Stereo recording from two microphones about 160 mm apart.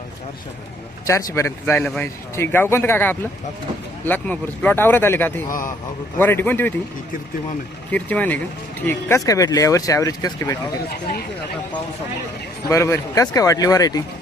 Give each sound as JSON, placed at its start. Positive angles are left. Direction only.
{"t": 1.0, "sound": "speech", "side_deg": 20}
{"t": 5.5, "sound": "a man's voice", "side_deg": 55}
{"t": 6.1, "sound": "speech", "side_deg": 10}
{"t": 7.9, "sound": "speech", "side_deg": 10}
{"t": 12.6, "sound": "speech", "side_deg": 20}